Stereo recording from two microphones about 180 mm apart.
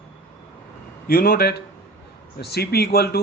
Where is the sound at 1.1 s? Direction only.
55° left (ahead or behind).